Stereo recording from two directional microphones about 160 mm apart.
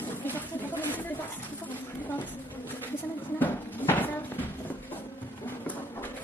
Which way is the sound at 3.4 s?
10° left (ahead or behind).